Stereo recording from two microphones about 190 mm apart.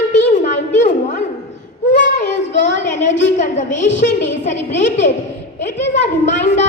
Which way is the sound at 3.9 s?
70° left (ahead or behind).